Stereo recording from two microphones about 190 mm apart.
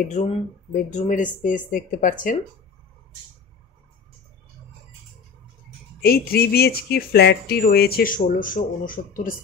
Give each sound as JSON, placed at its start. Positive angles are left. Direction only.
{"t": 0.0, "sound": "speech", "side_deg": 40}
{"t": 6.0, "sound": "speech", "side_deg": 55}